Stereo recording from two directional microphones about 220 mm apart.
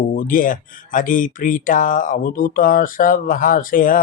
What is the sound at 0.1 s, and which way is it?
Speech, 40° left (ahead or behind).